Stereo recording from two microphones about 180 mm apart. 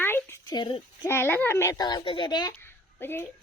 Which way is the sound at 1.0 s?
10° left (ahead or behind).